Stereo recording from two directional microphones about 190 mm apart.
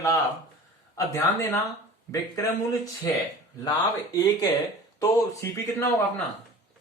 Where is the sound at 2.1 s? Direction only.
15° left (ahead or behind).